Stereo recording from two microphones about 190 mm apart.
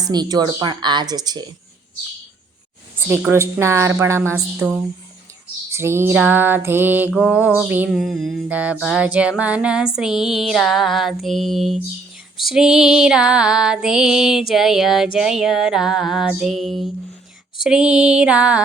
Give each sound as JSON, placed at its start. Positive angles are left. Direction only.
{"t": 0.0, "sound": "speech", "side_deg": -20}
{"t": 3.2, "sound": "a sound", "side_deg": -10}
{"t": 7.1, "sound": "music", "side_deg": -5}